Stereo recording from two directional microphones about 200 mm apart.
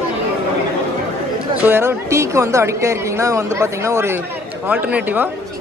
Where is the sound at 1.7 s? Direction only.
10° right (ahead or behind).